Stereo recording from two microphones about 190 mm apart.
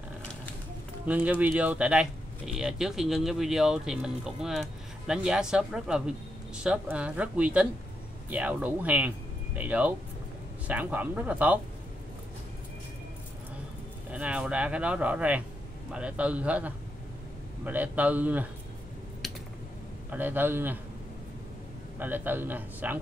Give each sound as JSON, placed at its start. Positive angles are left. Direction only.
{"t": 1.0, "sound": "speech", "side_deg": -5}
{"t": 14.1, "sound": "speech", "side_deg": -5}
{"t": 20.1, "sound": "speech", "side_deg": -10}
{"t": 21.9, "sound": "speech", "side_deg": -10}